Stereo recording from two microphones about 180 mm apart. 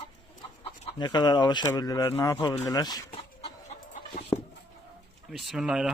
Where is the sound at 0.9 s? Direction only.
25° left (ahead or behind).